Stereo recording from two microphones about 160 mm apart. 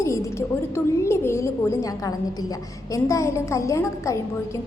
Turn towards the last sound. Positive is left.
turn(degrees=20)  # may be behind; listen again after turning